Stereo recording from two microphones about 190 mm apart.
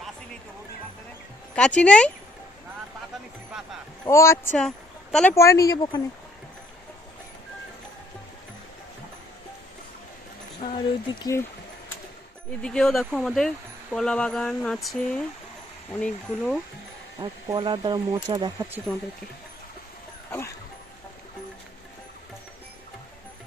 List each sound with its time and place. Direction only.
1.5 s speech: 5° left (ahead or behind)
4.0 s speech: 15° left (ahead or behind)
10.6 s speech: 25° left (ahead or behind)
12.6 s speech: 5° left (ahead or behind)
17.2 s speech: 20° right (ahead or behind)